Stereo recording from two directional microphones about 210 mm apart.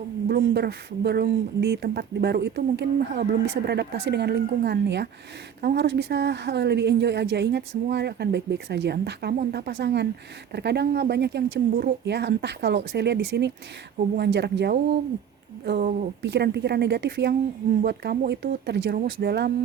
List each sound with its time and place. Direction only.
0.3 s speech: 50° right (ahead or behind)
16.2 s speech: 55° right (ahead or behind)